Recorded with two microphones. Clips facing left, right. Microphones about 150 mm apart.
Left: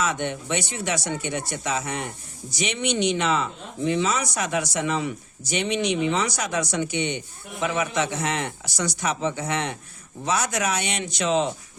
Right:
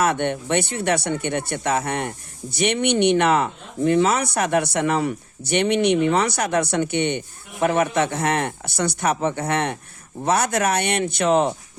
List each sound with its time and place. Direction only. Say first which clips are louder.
0.0 s speech: right 5 dB; 60° right (ahead or behind)